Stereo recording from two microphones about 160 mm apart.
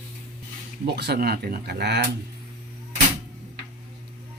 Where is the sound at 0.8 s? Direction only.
90° right.